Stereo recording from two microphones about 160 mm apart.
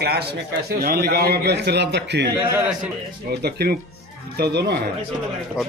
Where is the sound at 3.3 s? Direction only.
80° right.